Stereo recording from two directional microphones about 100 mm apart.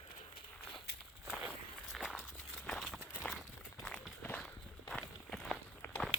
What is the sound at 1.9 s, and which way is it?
Walk, 5° right (ahead or behind).